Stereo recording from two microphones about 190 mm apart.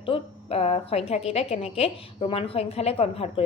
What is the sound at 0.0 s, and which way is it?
A woman's voice, 30° left (ahead or behind).